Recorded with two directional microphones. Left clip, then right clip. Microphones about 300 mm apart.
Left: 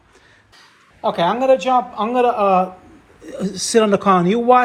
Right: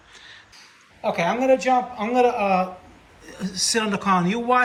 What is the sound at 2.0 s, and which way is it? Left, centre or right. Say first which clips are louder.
Speech: left 4 dB; centre.